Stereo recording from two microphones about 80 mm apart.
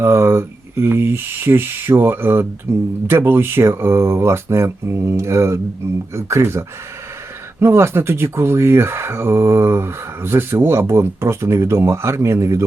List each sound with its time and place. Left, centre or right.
0.0 s speech: right